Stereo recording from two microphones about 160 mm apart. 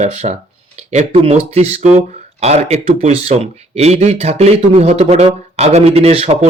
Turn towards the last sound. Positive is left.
turn(degrees=-40)  # may be behind; listen again after turning